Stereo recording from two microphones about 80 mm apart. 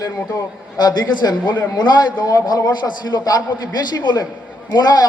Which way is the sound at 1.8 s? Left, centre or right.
Left.